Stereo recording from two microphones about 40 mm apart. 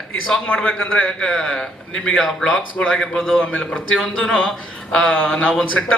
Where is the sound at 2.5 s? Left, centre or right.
Left.